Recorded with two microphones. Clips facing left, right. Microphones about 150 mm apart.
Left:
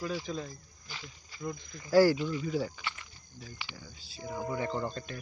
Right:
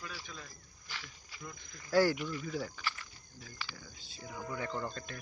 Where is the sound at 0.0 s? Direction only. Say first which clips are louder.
Left 12 dB; 30° left (ahead or behind).